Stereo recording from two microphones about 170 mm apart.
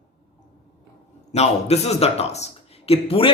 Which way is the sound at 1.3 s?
40° left (ahead or behind).